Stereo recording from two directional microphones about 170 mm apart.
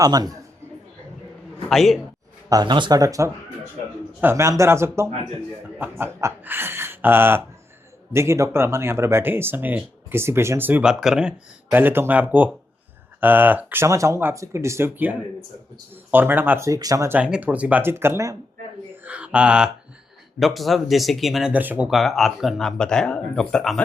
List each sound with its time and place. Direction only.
0.0 s speech: 20° right (ahead or behind)
1.6 s speech: centre (ahead or behind)
2.5 s speech: 25° right (ahead or behind)
19.0 s mantra: 10° right (ahead or behind)
20.4 s speech: centre (ahead or behind)